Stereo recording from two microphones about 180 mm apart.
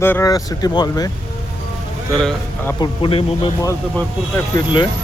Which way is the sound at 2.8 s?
30° left (ahead or behind).